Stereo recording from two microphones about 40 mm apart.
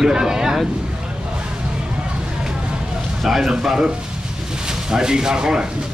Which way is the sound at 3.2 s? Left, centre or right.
Centre.